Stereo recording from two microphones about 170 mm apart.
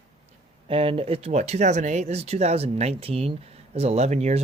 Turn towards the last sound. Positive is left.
turn(degrees=-40)  # may be behind; listen again after turning